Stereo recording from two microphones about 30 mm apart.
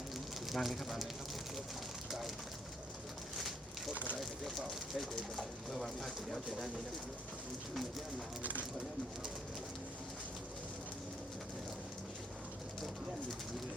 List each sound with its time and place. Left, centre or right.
0.5 s speech: centre
3.3 s a sound: centre
3.9 s speech: left
4.2 s speech: centre